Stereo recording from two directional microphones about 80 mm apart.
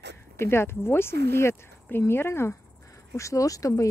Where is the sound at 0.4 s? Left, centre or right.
Left.